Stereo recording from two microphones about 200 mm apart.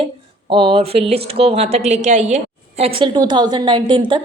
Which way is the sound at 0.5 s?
25° right (ahead or behind).